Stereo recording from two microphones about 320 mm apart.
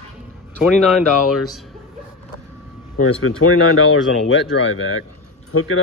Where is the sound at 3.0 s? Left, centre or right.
Left.